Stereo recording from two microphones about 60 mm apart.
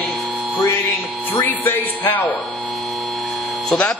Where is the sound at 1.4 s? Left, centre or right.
Left.